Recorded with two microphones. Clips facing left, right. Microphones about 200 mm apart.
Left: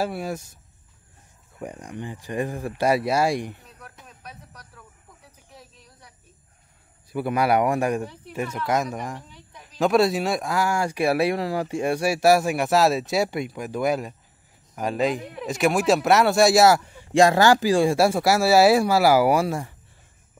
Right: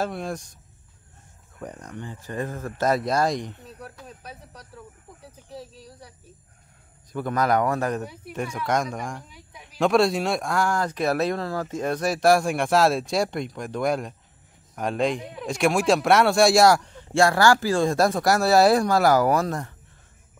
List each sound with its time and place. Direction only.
0.0 s speech: 5° left (ahead or behind)
1.6 s speech: 10° left (ahead or behind)
4.2 s speech: 30° right (ahead or behind)
5.5 s a sound: 35° right (ahead or behind)
7.1 s speech: 10° left (ahead or behind)
9.3 s a sound: 10° right (ahead or behind)
9.8 s speech: centre (ahead or behind)